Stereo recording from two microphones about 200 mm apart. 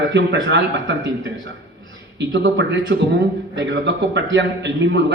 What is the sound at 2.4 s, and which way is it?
A man's voice, 60° right (ahead or behind).